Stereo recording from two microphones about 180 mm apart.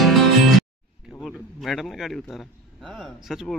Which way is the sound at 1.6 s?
Centre (ahead or behind).